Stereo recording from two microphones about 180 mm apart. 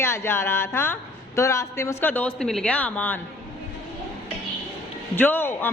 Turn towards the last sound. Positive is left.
turn(degrees=10)  # may be behind; listen again after turning